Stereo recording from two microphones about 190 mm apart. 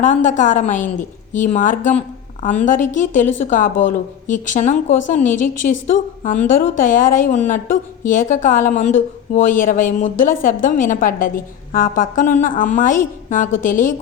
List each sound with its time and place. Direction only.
0.0 s a woman's voice: 40° left (ahead or behind)